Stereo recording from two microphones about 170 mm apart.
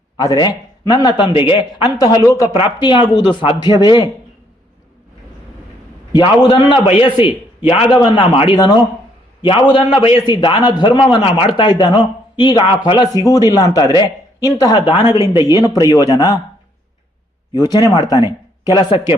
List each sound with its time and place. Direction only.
0.2 s speech: 20° left (ahead or behind)
6.1 s speech: 25° left (ahead or behind)
17.5 s speech: 20° left (ahead or behind)